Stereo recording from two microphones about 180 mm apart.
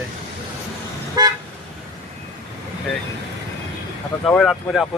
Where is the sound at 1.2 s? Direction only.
20° right (ahead or behind).